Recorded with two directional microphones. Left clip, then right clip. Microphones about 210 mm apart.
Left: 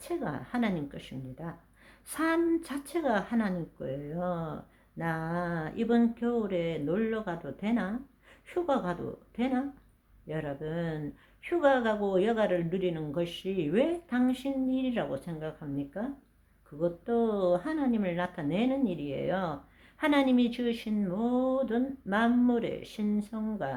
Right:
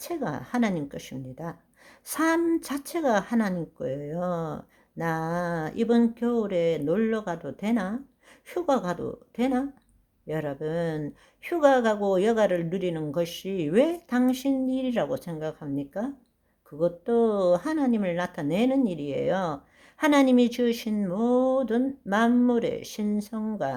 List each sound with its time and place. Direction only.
0.0 s a woman's voice: 40° right (ahead or behind)